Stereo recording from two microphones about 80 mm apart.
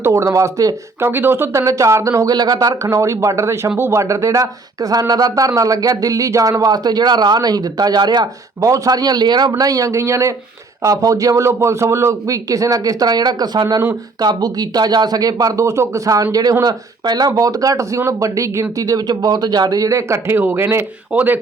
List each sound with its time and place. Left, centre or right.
0.0 s speech: right
1.0 s speech: right
1.5 s speech: right
2.3 s speech: right
2.8 s speech: right
8.6 s speech: right
17.3 s speech: right
21.1 s speech: centre